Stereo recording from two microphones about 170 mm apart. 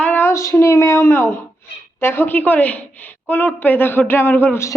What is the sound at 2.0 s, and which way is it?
A woman's voice, 10° left (ahead or behind).